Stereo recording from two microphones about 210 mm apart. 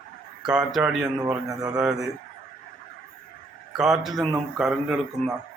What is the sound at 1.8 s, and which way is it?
Speech, 5° right (ahead or behind).